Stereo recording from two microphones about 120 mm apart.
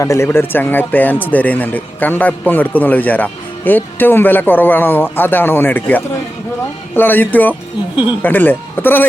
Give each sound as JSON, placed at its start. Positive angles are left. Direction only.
{"t": 0.0, "sound": "speech", "side_deg": 25}